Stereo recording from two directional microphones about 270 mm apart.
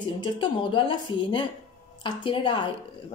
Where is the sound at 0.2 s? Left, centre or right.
Centre.